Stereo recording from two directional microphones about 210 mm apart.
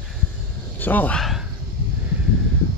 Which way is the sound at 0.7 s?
10° left (ahead or behind).